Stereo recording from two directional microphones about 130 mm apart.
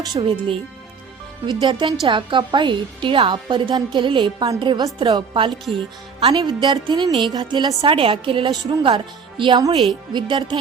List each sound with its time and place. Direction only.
0.0 s speech: 40° right (ahead or behind)
1.6 s a woman's voice: 35° right (ahead or behind)
6.3 s a woman's voice: 35° right (ahead or behind)